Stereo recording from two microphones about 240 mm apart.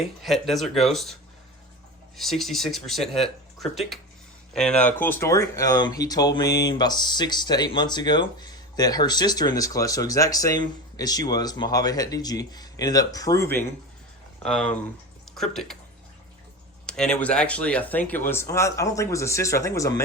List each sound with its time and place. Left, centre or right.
0.2 s speech: centre
2.1 s speech: centre
16.8 s speech: centre